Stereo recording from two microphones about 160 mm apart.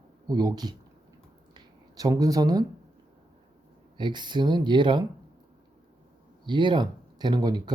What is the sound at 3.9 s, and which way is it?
Speech, 30° right (ahead or behind).